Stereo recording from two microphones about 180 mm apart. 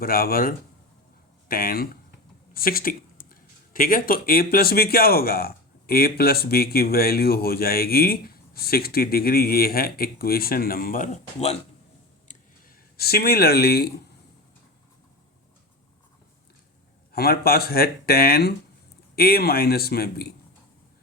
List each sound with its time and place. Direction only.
0.0 s speech: 55° left (ahead or behind); by 11.5 s 40° left (ahead or behind)
12.3 s a sound: 55° left (ahead or behind)
17.1 s speech: 60° left (ahead or behind)